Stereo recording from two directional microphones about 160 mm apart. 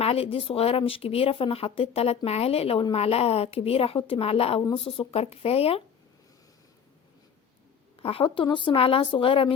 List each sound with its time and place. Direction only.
0.0 s speech: 40° left (ahead or behind)
7.9 s speech: 35° left (ahead or behind)